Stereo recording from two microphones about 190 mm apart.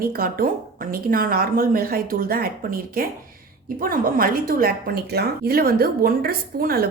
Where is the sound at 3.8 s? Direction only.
50° right (ahead or behind).